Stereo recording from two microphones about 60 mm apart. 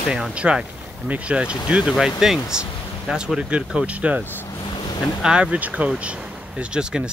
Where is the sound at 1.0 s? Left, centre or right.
Right.